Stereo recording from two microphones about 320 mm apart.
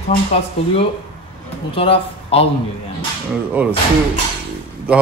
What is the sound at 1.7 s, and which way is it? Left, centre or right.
Speech, centre.